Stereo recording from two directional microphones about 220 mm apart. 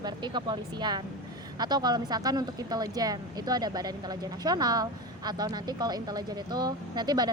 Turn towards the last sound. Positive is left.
turn(degrees=-20)  # may be behind; listen again after turning